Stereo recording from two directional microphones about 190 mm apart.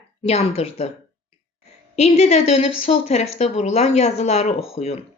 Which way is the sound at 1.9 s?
35° left (ahead or behind).